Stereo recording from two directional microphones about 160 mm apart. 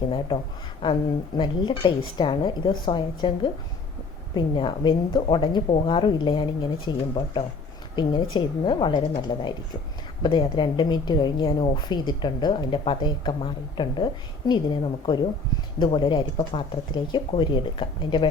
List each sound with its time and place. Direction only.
0.8 s a woman's voice: 30° left (ahead or behind)